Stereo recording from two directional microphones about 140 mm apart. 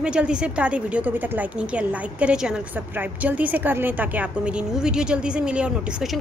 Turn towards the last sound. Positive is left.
turn(degrees=-5)  # may be behind; listen again after turning